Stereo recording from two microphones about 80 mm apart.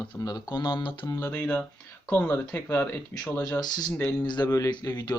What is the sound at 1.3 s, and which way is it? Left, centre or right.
Speech, centre.